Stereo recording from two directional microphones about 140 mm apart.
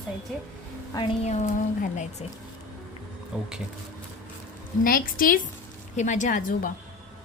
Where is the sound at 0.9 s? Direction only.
25° left (ahead or behind).